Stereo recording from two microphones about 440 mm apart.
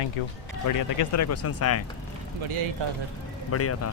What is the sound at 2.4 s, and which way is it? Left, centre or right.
Speech, right.